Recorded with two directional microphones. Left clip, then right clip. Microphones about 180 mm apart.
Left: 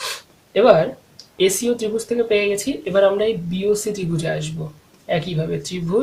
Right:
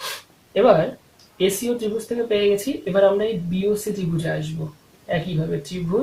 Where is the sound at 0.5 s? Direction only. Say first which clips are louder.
Left 2 dB; 40° left (ahead or behind).